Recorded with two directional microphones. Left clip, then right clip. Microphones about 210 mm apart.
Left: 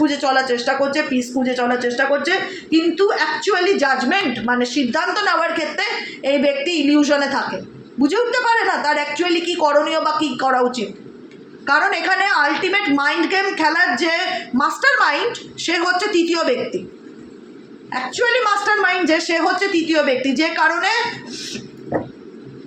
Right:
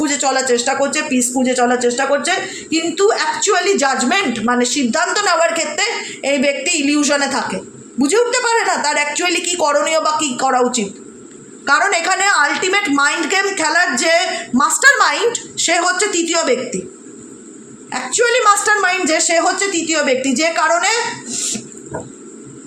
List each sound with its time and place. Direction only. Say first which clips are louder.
0.0 s speech: even; 45° right (ahead or behind)
17.9 s speech: right 3 dB; 45° right (ahead or behind)